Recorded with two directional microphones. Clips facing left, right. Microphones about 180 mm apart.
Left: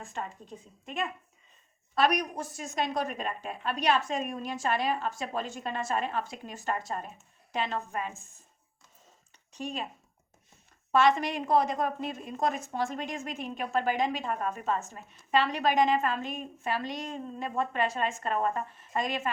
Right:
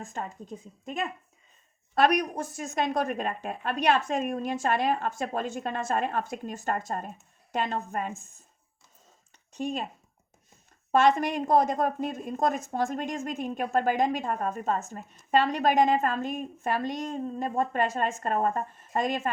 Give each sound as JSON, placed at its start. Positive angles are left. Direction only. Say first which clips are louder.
{"t": 0.1, "sound": "a woman's voice", "louder": "right 2 dB", "side_deg": -45}
{"t": 9.5, "sound": "a woman's voice", "louder": "right 5 dB", "side_deg": -45}
{"t": 10.9, "sound": "a woman's voice", "louder": "right 2 dB", "side_deg": -45}